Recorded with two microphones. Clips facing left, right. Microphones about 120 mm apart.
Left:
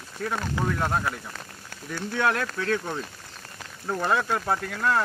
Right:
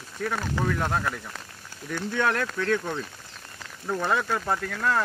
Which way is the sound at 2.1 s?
10° left (ahead or behind).